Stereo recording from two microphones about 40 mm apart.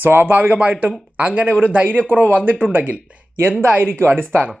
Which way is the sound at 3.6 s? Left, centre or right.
Right.